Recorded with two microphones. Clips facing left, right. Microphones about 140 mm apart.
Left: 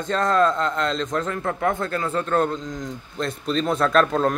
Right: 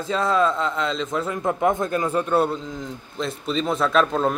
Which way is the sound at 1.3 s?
15° right (ahead or behind).